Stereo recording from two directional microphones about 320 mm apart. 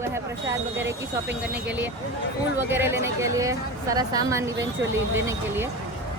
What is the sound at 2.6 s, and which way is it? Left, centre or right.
A woman's voice, centre.